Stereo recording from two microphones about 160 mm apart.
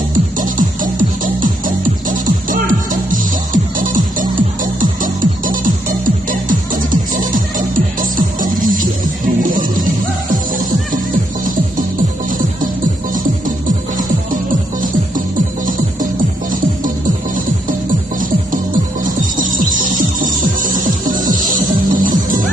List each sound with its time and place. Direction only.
0.4 s music: 55° right (ahead or behind)
11.4 s music: 60° right (ahead or behind)
13.9 s music: 55° right (ahead or behind)
19.0 s music: 55° right (ahead or behind)